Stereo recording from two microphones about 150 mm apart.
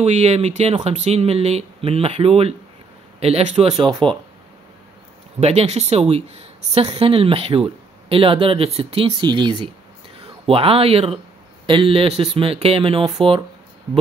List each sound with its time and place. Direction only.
0.0 s speech: 45° right (ahead or behind)
5.4 s speech: 45° right (ahead or behind)